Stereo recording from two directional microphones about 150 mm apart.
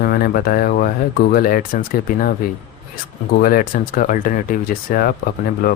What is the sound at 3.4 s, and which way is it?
A man's voice, 75° left (ahead or behind).